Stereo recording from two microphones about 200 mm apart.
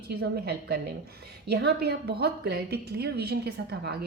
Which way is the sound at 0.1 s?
55° right (ahead or behind).